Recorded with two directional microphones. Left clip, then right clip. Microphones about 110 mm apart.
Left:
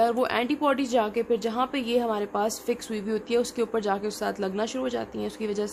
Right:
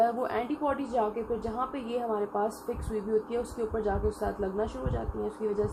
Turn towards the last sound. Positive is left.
turn(degrees=40)  # may be behind; listen again after turning